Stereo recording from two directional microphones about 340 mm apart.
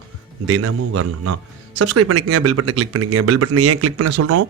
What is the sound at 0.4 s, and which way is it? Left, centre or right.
A man's voice, right.